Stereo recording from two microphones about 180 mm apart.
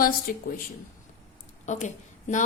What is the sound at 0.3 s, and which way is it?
Speech, 55° left (ahead or behind).